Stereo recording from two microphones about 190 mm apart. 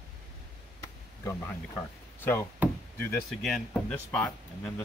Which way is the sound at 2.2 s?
10° left (ahead or behind).